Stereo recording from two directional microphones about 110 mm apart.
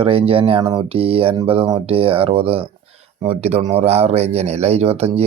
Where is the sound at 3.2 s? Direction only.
70° right (ahead or behind).